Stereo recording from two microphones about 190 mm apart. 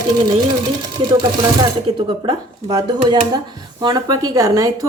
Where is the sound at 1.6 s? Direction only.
25° right (ahead or behind).